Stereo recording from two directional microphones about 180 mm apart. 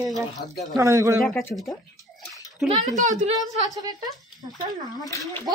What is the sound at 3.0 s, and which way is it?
Speech, 45° right (ahead or behind).